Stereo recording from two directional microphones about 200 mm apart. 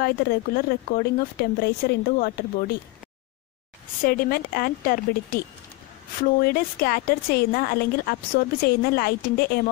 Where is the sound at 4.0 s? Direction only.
45° left (ahead or behind).